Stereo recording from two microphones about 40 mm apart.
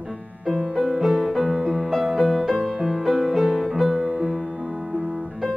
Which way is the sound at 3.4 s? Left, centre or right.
Centre.